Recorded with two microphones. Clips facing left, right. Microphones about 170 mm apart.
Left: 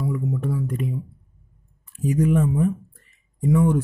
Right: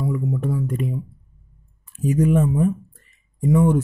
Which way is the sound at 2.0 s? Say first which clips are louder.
Right 2 dB; 25° right (ahead or behind).